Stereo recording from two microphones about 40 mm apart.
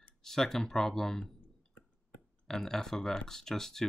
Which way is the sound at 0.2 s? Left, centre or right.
Centre.